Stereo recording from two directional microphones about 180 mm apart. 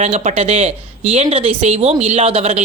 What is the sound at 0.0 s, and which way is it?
Speech, 40° right (ahead or behind).